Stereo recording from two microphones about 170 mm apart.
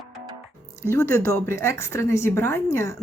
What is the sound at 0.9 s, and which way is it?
A woman's voice, 15° left (ahead or behind).